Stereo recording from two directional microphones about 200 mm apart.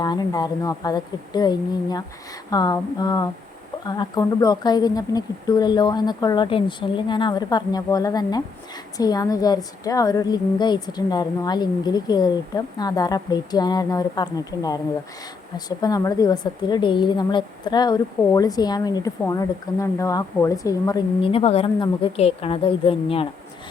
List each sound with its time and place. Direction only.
0.0 s speech: 20° left (ahead or behind)